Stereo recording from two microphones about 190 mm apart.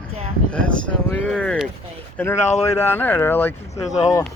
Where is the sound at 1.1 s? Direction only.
5° left (ahead or behind).